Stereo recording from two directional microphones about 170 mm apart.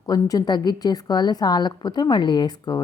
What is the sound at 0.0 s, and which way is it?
A woman's voice, 20° left (ahead or behind).